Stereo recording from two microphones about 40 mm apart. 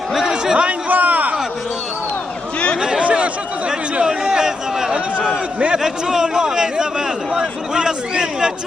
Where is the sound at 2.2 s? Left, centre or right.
Left.